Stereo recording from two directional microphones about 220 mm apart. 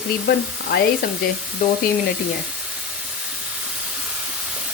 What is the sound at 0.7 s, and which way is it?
Speech, 45° left (ahead or behind).